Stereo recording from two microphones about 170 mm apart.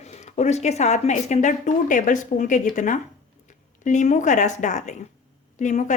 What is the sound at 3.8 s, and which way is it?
Speech, 45° left (ahead or behind).